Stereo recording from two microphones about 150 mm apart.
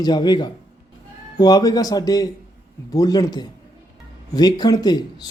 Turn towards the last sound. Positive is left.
turn(degrees=25)  # may be behind; listen again after turning